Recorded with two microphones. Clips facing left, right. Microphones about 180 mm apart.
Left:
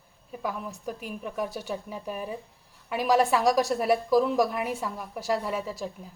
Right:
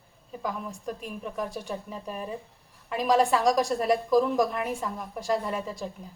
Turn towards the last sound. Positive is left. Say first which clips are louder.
# left 1 dB
turn(degrees=5)  # may be behind; listen again after turning